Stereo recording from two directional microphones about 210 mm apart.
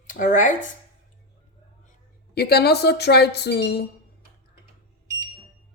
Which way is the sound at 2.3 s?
50° left (ahead or behind).